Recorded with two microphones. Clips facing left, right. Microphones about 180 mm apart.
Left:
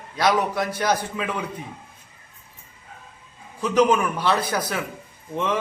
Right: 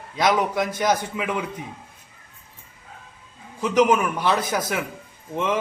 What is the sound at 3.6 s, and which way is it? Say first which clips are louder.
Speech: even; 20° right (ahead or behind).